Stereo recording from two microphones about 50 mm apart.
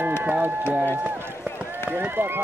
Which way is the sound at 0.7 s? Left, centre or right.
Right.